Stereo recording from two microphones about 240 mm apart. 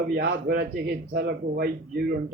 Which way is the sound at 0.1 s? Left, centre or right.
Right.